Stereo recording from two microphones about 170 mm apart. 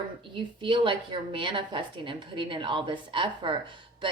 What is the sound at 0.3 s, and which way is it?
A woman's voice, 30° right (ahead or behind).